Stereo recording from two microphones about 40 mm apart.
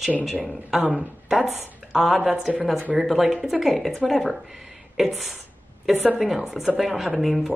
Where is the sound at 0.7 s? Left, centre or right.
Centre.